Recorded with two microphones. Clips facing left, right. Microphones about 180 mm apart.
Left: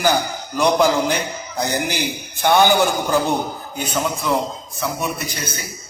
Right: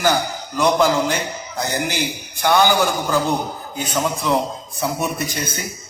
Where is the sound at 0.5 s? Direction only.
15° left (ahead or behind).